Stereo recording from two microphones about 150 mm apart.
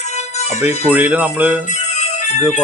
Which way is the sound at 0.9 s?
10° right (ahead or behind).